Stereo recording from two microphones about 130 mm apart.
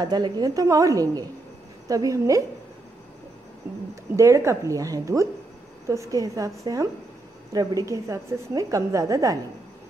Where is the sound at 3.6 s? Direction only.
15° right (ahead or behind).